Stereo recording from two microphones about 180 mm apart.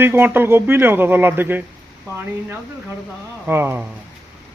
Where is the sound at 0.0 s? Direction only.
10° right (ahead or behind).